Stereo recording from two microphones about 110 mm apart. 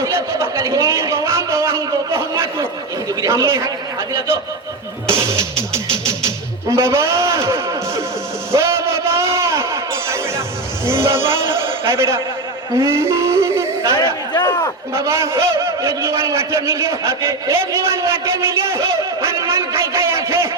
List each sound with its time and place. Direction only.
0.0 s a sound: 25° right (ahead or behind)
3.2 s a man's voice: 25° right (ahead or behind)
5.1 s music: 25° right (ahead or behind)
6.7 s a man's voice: 25° right (ahead or behind)
7.1 s a sound: 25° right (ahead or behind)
8.5 s music: 25° right (ahead or behind)
10.8 s speech: 25° right (ahead or behind)
12.7 s music: 25° right (ahead or behind)
13.9 s speech: 40° left (ahead or behind)
14.9 s a man's voice: 25° right (ahead or behind)